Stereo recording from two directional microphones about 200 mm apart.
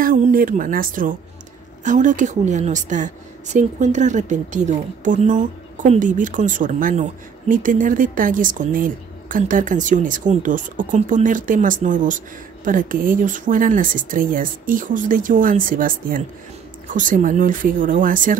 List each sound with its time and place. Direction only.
0.0 s a woman's voice: 45° right (ahead or behind)